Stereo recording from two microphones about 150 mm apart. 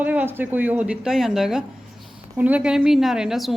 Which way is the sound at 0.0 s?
10° right (ahead or behind).